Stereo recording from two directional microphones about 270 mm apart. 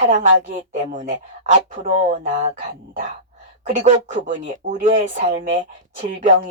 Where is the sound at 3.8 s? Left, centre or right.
Right.